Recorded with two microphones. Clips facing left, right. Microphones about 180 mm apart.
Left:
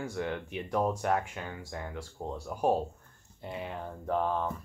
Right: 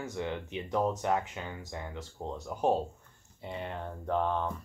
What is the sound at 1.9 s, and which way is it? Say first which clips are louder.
Speech: left 1 dB; 10° left (ahead or behind).